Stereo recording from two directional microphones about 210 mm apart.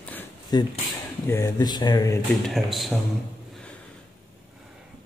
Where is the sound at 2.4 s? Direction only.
Centre (ahead or behind).